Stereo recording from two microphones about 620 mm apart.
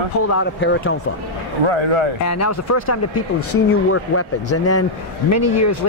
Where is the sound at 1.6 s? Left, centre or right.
Right.